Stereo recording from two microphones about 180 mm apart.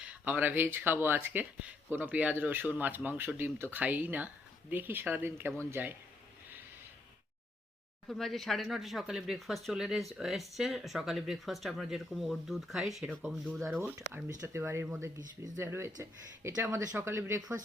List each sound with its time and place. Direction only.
0.0 s speech: 10° right (ahead or behind)
8.0 s speech: centre (ahead or behind); by 17.5 s 15° right (ahead or behind)